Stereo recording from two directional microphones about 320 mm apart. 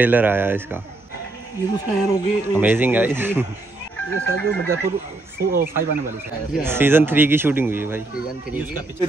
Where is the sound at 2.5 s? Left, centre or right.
Centre.